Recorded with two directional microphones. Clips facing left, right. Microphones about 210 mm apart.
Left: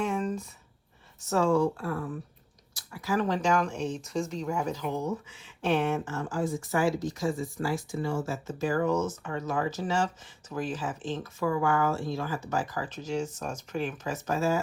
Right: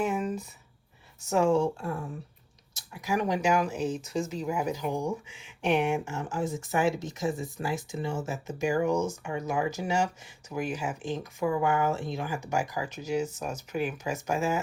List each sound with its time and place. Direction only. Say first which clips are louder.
0.0 s a sound: right 1 dB; 5° right (ahead or behind)
1.3 s speech: even; 20° right (ahead or behind)
2.7 s speech: left 1 dB; 20° right (ahead or behind)